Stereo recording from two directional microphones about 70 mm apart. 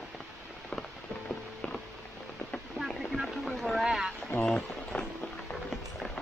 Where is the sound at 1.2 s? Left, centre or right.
Centre.